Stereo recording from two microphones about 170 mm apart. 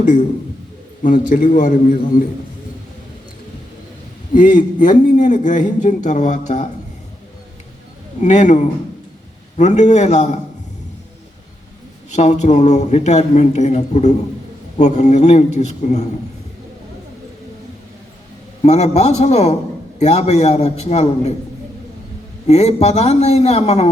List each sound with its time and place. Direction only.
1.0 s a man's voice: 50° left (ahead or behind)
4.4 s a man's voice: 50° left (ahead or behind)
8.2 s a man's voice: 45° left (ahead or behind)
12.1 s a man's voice: 45° left (ahead or behind)
18.6 s a man's voice: 40° left (ahead or behind)
22.4 s a man's voice: 40° left (ahead or behind)